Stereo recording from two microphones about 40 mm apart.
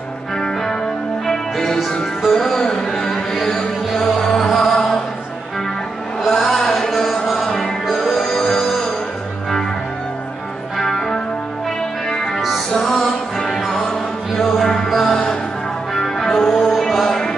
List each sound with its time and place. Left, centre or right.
0.4 s music: centre
6.2 s a sound: centre
7.2 s music: centre
10.8 s music: centre
12.7 s music: centre
15.9 s music: centre